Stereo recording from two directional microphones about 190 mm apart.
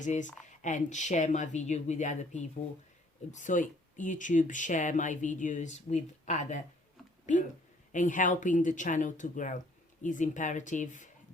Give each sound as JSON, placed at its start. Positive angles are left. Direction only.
{"t": 0.0, "sound": "speech", "side_deg": 40}